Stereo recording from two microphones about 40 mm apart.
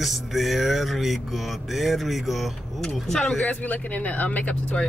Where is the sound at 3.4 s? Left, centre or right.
Left.